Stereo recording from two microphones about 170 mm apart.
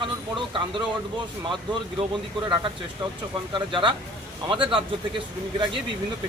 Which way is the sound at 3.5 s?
30° right (ahead or behind).